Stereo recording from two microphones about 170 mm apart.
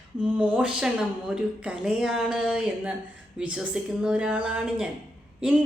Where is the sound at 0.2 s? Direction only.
5° right (ahead or behind).